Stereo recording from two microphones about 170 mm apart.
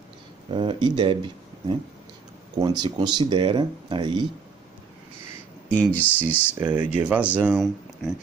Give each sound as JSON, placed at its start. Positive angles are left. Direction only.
{"t": 0.5, "sound": "speech", "side_deg": -30}
{"t": 5.7, "sound": "speech", "side_deg": 10}
{"t": 6.6, "sound": "speech", "side_deg": -10}